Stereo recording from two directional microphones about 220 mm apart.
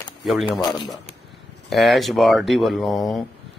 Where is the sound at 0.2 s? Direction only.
Centre (ahead or behind).